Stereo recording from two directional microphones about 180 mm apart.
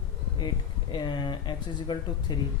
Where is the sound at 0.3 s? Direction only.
25° left (ahead or behind).